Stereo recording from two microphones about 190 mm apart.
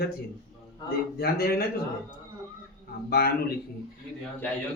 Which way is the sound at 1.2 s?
55° left (ahead or behind).